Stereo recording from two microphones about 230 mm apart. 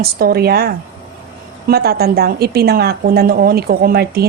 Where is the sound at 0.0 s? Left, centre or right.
Right.